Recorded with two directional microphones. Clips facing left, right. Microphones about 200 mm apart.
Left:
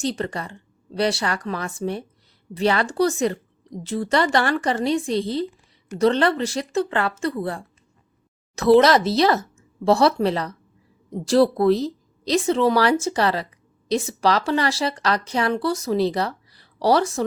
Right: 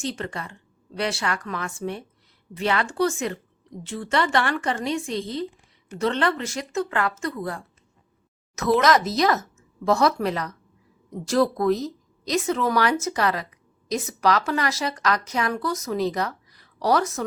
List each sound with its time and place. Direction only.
0.0 s speech: 35° left (ahead or behind)